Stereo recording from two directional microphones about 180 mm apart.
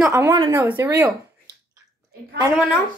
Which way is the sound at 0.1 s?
15° right (ahead or behind).